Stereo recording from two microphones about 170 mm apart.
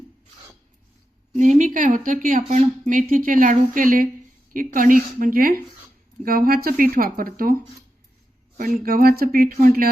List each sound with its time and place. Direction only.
1.3 s a woman's voice: 45° right (ahead or behind)
8.8 s speech: 60° right (ahead or behind)